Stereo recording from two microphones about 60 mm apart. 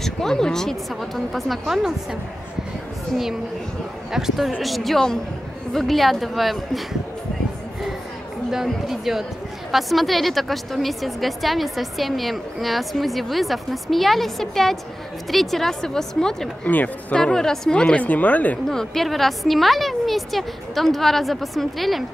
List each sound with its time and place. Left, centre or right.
0.0 s a woman's voice: centre
4.1 s a woman's voice: centre
8.5 s a woman's voice: centre
16.6 s speech: left
17.1 s a woman's voice: centre
18.7 s a woman's voice: centre